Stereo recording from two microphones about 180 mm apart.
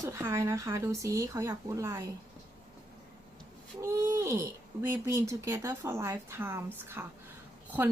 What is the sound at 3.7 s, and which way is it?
Speech, 15° right (ahead or behind).